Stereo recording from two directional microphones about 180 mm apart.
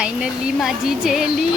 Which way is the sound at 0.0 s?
5° right (ahead or behind).